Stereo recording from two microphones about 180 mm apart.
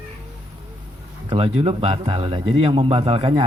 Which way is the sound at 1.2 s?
35° right (ahead or behind).